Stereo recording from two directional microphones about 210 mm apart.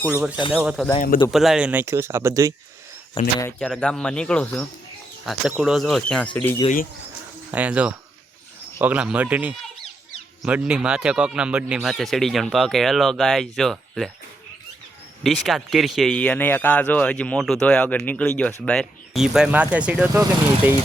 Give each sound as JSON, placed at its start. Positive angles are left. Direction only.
{"t": 0.0, "sound": "speech", "side_deg": -10}
{"t": 0.9, "sound": "speech", "side_deg": 40}
{"t": 1.3, "sound": "speech", "side_deg": 0}
{"t": 3.4, "sound": "speech", "side_deg": 5}
{"t": 7.5, "sound": "speech", "side_deg": -5}
{"t": 15.2, "sound": "speech", "side_deg": 0}